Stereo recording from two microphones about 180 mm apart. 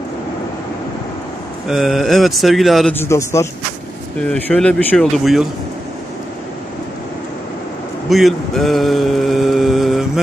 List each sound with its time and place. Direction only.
1.7 s speech: centre (ahead or behind)
2.9 s a man's voice: 15° left (ahead or behind)
4.3 s speech: 5° left (ahead or behind)
8.1 s mantra: centre (ahead or behind)